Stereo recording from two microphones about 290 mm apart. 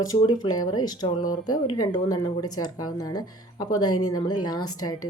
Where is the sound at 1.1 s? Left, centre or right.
Left.